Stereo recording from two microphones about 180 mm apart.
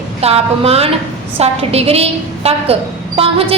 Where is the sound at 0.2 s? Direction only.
35° right (ahead or behind).